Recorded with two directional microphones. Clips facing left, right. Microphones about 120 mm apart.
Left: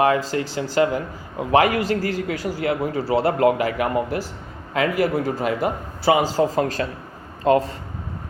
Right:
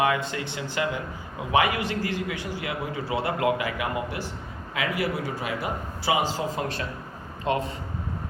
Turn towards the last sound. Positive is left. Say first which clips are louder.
# left 8 dB
turn(degrees=40)  # may be behind; listen again after turning